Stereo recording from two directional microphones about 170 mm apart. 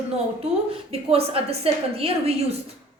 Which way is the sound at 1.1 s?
35° right (ahead or behind).